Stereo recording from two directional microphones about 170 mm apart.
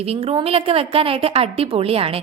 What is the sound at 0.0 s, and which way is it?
A woman's voice, 35° right (ahead or behind).